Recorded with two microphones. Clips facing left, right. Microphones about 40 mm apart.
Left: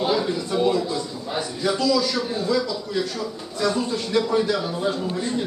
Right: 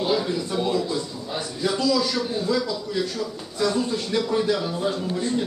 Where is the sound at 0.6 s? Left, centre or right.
Centre.